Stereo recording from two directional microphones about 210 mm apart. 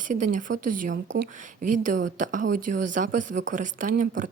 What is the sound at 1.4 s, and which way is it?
A woman's voice, 40° right (ahead or behind).